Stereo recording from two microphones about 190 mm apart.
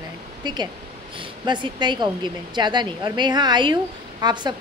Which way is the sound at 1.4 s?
25° right (ahead or behind).